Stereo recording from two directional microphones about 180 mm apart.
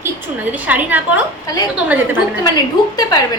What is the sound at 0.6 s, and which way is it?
Speech, 10° right (ahead or behind).